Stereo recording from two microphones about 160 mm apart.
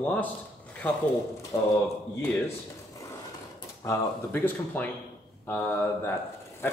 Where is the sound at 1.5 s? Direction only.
15° left (ahead or behind).